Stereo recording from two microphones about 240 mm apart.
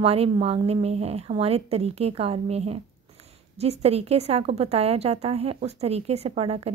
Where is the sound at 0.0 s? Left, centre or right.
Right.